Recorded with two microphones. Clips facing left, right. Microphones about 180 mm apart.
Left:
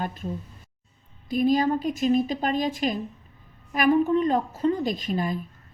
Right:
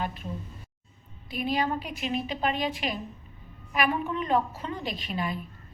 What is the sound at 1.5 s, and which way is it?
A woman's voice, 40° left (ahead or behind).